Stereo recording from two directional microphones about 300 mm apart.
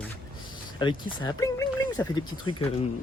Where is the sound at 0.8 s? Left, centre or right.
Centre.